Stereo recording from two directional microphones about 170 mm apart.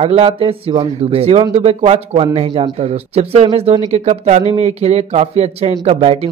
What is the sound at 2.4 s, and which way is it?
Speech, 25° right (ahead or behind).